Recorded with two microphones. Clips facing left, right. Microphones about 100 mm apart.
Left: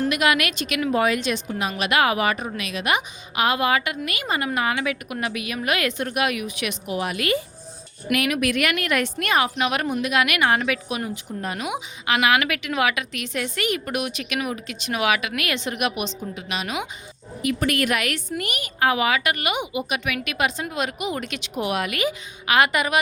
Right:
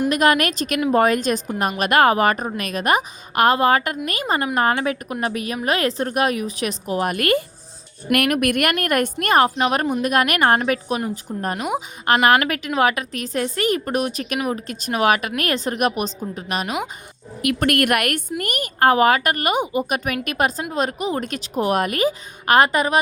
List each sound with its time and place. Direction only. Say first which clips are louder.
0.1 s a woman's voice: right 4 dB; 40° right (ahead or behind)
17.4 s a woman's voice: right 3 dB; 60° right (ahead or behind); by 23.0 s 35° right (ahead or behind)